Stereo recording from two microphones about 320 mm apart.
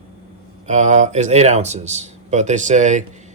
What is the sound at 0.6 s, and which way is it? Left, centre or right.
Speech, right.